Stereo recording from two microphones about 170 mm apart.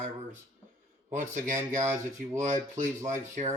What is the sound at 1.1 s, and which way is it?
Speech, 50° right (ahead or behind).